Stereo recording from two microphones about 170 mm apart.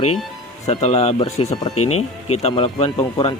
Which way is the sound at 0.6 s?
40° left (ahead or behind).